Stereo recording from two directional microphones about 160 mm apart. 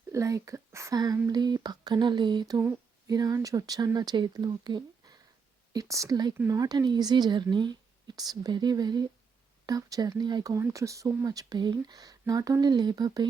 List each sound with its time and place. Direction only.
0.1 s a woman's voice: 20° right (ahead or behind)